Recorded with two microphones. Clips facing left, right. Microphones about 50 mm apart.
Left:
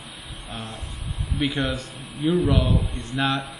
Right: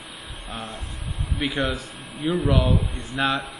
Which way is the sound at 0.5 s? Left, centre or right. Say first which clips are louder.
Right 1 dB; right.